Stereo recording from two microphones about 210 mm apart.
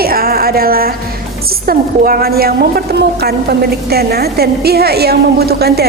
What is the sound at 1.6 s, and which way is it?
A woman's voice, 45° right (ahead or behind).